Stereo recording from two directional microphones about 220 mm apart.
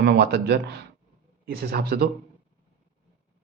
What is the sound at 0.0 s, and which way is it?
Speech, 50° right (ahead or behind).